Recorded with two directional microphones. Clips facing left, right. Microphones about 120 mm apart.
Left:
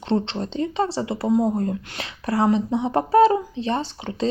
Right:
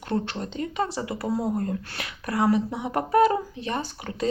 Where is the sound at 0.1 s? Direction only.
25° left (ahead or behind).